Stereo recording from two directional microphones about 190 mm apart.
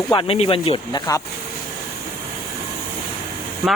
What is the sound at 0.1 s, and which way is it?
Speech, 30° left (ahead or behind).